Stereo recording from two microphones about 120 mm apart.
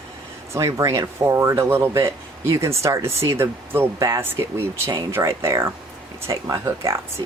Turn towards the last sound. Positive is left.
turn(degrees=-35)  # may be behind; listen again after turning